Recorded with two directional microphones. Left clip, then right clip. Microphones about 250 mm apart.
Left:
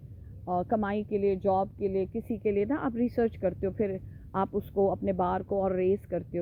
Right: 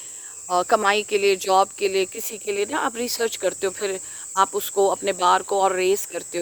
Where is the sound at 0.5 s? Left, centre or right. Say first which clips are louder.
Right 11 dB; right.